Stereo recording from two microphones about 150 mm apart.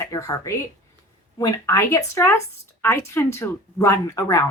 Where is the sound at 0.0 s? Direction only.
20° left (ahead or behind).